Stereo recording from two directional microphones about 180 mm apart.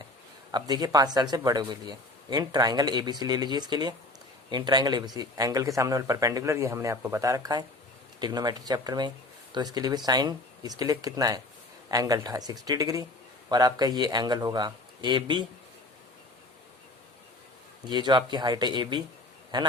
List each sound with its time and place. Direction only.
0.5 s speech: 20° right (ahead or behind)
17.8 s speech: 25° right (ahead or behind)